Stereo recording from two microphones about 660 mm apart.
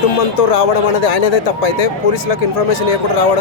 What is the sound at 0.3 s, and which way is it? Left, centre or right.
Speech, left.